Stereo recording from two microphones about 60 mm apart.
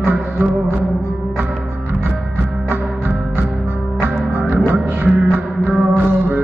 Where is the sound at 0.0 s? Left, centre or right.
Right.